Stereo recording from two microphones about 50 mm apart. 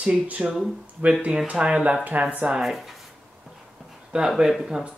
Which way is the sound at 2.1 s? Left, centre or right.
Right.